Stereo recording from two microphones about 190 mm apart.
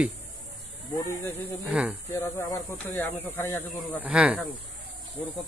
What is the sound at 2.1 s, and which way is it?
Speech, 15° left (ahead or behind).